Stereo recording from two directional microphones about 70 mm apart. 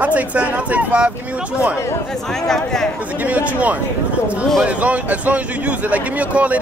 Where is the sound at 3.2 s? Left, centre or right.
Right.